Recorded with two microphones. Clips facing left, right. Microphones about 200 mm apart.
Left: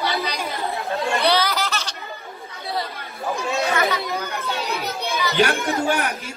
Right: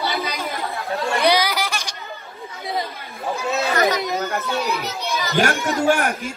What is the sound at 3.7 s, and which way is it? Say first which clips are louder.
Chatter: right 4 dB; 40° right (ahead or behind).